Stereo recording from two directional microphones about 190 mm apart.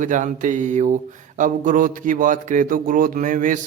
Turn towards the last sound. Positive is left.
turn(degrees=-45)  # may be behind; listen again after turning